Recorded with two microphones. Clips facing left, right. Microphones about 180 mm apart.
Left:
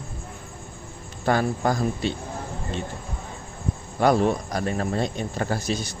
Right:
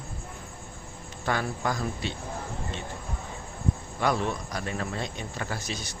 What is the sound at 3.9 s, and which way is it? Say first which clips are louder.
Speech: left 9 dB; 40° left (ahead or behind).